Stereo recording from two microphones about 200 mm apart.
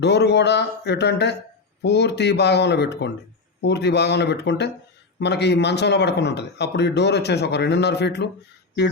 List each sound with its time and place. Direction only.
0.0 s speech: 55° left (ahead or behind)